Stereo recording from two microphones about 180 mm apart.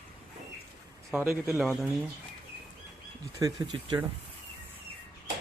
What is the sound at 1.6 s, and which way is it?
Speech, centre (ahead or behind).